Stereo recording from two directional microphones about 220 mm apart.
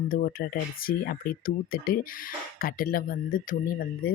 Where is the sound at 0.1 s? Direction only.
40° left (ahead or behind).